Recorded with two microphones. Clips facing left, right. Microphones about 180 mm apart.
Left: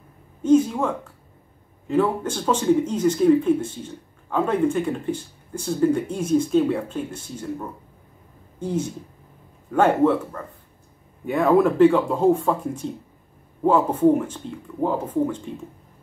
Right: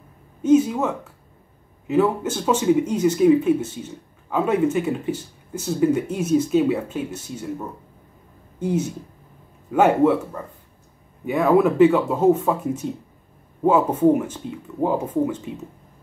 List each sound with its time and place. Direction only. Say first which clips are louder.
0.4 s speech: right 1 dB; 5° right (ahead or behind)